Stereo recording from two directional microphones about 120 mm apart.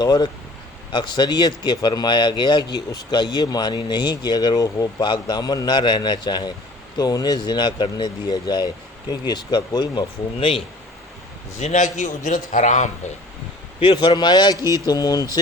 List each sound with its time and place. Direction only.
0.0 s speech: 35° left (ahead or behind)
11.5 s a man's voice: 85° left
13.7 s speech: 45° left (ahead or behind)